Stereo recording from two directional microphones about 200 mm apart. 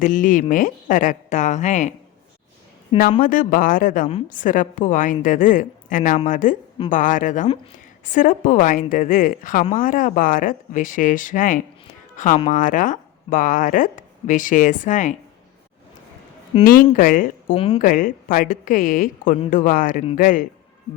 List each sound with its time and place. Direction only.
0.0 s speech: 40° left (ahead or behind)
3.0 s a woman's voice: 40° left (ahead or behind)
16.6 s a woman's voice: 45° left (ahead or behind)
17.5 s speech: 25° left (ahead or behind)
17.7 s a woman's voice: 45° left (ahead or behind)